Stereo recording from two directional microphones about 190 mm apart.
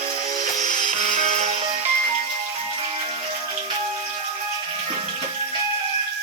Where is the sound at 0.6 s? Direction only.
40° right (ahead or behind).